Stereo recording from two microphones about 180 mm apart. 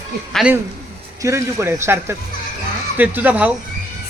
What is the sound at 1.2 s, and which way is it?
A man's voice, 15° right (ahead or behind).